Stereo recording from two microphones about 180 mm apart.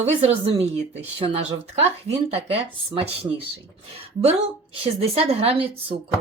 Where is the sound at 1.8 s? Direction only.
35° right (ahead or behind).